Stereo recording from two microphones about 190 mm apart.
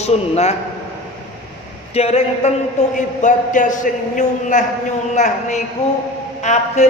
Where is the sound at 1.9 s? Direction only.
30° left (ahead or behind).